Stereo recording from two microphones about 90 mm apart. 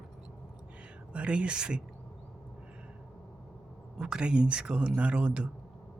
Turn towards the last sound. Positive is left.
turn(degrees=-10)  # may be behind; listen again after turning